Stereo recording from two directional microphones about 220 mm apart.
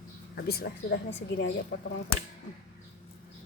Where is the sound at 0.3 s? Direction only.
45° left (ahead or behind).